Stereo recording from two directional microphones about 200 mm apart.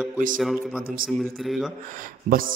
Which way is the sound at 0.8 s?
45° right (ahead or behind).